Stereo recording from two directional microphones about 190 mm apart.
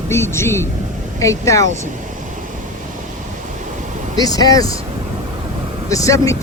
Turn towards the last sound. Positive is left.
turn(degrees=15)  # may be behind; listen again after turning